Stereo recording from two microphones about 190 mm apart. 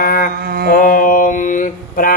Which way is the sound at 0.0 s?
50° left (ahead or behind).